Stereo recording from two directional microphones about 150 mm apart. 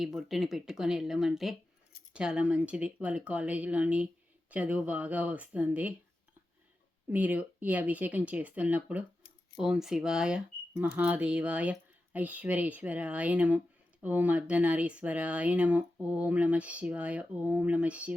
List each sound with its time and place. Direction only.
0.0 s speech: centre (ahead or behind)
7.1 s speech: 10° right (ahead or behind)